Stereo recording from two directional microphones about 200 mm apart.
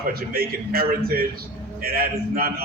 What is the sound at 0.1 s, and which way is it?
A man's voice, 50° right (ahead or behind).